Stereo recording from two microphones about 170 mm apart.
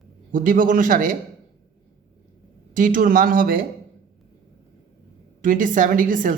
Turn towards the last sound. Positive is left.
turn(degrees=-50)  # may be behind; listen again after turning